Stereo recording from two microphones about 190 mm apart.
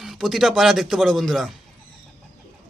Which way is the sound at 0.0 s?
Centre (ahead or behind).